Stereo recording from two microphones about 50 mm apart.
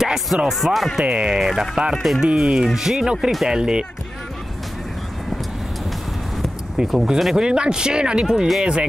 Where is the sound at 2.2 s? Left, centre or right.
Centre.